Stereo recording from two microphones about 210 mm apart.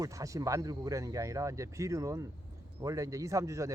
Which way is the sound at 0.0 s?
15° right (ahead or behind).